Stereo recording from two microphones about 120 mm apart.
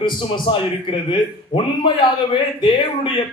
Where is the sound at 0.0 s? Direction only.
45° left (ahead or behind).